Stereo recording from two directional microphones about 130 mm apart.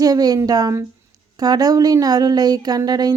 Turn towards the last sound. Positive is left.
turn(degrees=-30)  # may be behind; listen again after turning